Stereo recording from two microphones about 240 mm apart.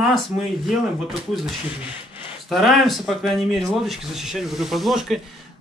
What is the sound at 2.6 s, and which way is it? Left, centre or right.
Speech, centre.